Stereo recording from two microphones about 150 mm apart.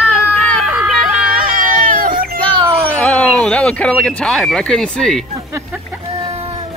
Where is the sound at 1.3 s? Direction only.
70° right (ahead or behind).